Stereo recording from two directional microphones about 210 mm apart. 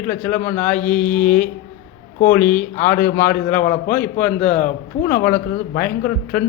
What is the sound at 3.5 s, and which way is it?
Speech, 40° left (ahead or behind).